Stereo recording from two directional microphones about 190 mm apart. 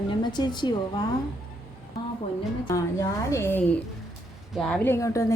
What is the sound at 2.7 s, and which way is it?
A woman's voice, 15° left (ahead or behind).